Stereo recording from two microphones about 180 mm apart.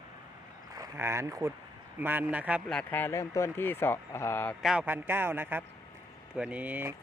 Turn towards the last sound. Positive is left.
turn(degrees=-10)  # may be behind; listen again after turning